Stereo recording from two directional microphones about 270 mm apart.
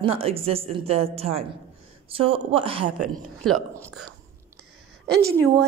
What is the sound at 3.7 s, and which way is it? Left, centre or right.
Speech, centre.